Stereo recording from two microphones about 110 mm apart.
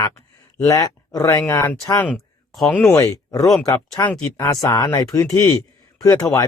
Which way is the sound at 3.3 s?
5° left (ahead or behind).